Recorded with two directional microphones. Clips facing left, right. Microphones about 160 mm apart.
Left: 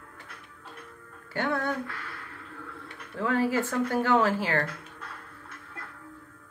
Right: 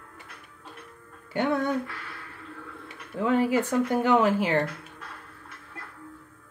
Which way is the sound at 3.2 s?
15° right (ahead or behind).